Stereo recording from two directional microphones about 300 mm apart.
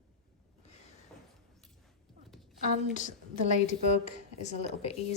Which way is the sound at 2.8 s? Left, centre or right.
Left.